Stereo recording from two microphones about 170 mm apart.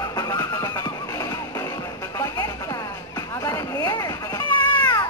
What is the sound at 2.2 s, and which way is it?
Music, 20° left (ahead or behind).